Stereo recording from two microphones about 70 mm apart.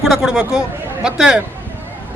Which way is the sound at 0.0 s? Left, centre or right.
Centre.